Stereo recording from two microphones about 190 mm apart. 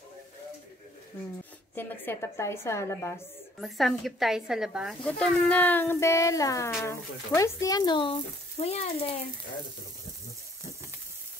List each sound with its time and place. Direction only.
1.8 s a woman's voice: 10° left (ahead or behind)
3.6 s speech: centre (ahead or behind); by 9.2 s 35° left (ahead or behind)